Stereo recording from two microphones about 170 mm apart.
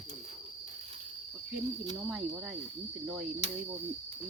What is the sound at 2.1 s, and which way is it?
Snake, centre (ahead or behind).